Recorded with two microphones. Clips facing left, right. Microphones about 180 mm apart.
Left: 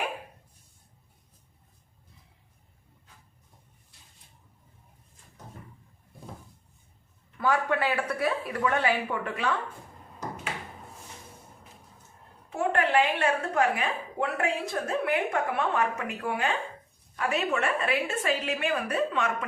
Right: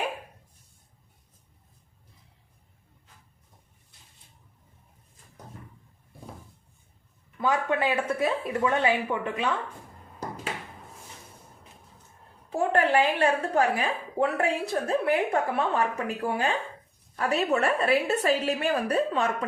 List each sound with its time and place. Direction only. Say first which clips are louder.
7.3 s speech: even; 20° right (ahead or behind)
12.5 s a woman's voice: right 3 dB; 35° right (ahead or behind)